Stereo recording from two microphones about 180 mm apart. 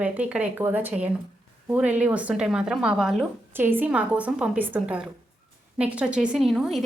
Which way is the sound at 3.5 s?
10° right (ahead or behind).